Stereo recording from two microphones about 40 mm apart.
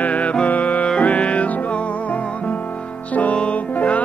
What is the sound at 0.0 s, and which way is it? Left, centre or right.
Music, left.